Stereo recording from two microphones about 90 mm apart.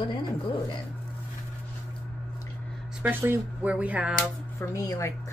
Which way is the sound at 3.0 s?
20° right (ahead or behind).